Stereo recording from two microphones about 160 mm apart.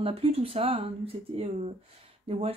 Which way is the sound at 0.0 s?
35° right (ahead or behind).